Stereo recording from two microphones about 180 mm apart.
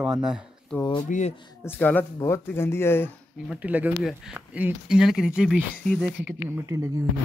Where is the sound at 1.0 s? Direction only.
40° left (ahead or behind).